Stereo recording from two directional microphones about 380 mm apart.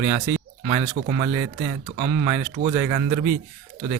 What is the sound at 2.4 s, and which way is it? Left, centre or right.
Speech, centre.